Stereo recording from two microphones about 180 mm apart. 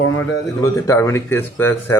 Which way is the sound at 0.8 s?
15° left (ahead or behind).